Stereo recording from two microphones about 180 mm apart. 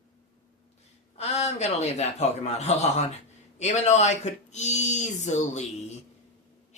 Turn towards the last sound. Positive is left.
turn(degrees=40)  # may be behind; listen again after turning